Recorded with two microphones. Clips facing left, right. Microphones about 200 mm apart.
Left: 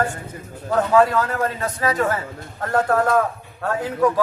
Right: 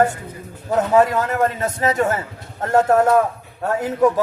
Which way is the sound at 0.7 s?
20° right (ahead or behind).